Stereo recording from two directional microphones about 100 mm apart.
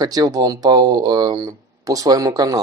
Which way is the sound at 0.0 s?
40° right (ahead or behind).